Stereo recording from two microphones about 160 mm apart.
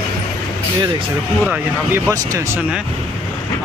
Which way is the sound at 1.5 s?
10° right (ahead or behind).